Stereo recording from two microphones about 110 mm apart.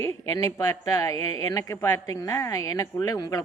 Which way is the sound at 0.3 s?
35° left (ahead or behind).